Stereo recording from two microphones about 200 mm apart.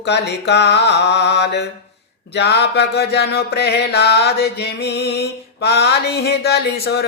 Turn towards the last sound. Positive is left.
turn(degrees=55)  # may be behind; listen again after turning